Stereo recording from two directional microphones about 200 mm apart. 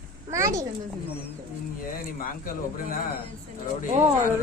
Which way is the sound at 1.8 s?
45° left (ahead or behind).